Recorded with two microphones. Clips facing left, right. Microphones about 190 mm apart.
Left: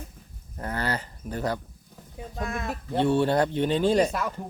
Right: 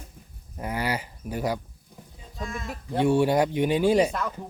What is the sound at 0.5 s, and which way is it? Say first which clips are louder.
Speech: right 1 dB; 10° right (ahead or behind).